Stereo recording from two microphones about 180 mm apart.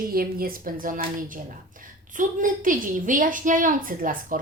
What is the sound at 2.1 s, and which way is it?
A woman's voice, 45° right (ahead or behind).